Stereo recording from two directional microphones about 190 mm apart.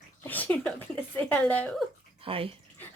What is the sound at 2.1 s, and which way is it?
Speech, 30° right (ahead or behind).